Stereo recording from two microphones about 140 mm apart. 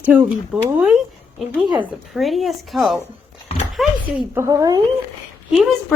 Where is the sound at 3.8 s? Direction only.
Centre (ahead or behind).